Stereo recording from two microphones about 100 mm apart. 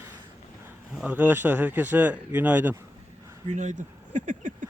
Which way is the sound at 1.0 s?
15° right (ahead or behind).